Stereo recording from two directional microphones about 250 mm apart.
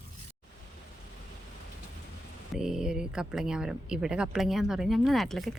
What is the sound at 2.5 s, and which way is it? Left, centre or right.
Speech, centre.